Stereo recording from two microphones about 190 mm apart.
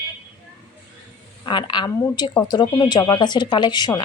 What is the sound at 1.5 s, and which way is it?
Speech, 25° left (ahead or behind).